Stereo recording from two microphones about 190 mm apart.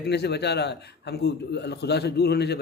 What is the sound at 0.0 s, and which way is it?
A man's voice, 60° left (ahead or behind).